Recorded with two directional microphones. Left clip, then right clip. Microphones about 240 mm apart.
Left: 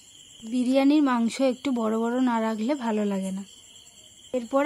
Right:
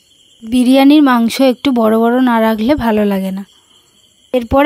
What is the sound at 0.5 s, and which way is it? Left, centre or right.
Speech, right.